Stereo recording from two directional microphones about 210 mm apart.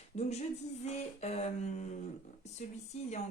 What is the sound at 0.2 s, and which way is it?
Speech, 30° left (ahead or behind).